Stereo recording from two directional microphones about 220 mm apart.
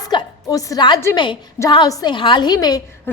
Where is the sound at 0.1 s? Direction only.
15° left (ahead or behind).